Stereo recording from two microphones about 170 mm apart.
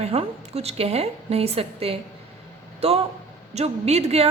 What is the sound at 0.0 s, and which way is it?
A woman's voice, 35° right (ahead or behind).